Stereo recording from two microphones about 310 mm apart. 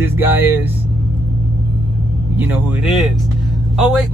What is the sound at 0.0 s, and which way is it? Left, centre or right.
Speech, centre.